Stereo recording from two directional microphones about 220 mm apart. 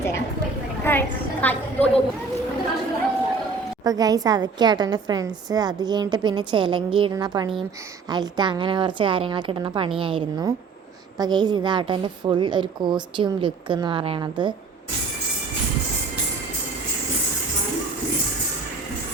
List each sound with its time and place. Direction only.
0.9 s a woman's voice: 10° left (ahead or behind)
3.8 s a woman's voice: 15° right (ahead or behind)